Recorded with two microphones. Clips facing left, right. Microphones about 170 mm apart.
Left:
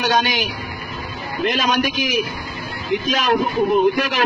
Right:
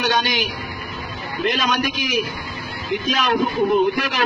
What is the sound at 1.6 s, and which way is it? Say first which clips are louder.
A man's voice: left 2 dB; 45° left (ahead or behind).